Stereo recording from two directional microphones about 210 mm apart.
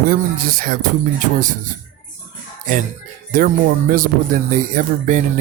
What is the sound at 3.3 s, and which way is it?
Speech, 40° right (ahead or behind).